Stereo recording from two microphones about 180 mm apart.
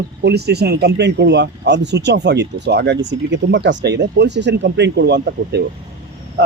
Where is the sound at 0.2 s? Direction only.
65° right (ahead or behind).